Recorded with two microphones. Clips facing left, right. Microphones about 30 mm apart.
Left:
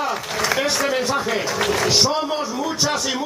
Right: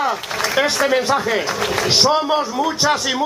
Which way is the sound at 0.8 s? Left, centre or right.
Centre.